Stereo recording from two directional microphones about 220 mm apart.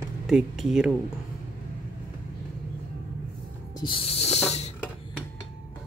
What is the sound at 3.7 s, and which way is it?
Music, 20° left (ahead or behind).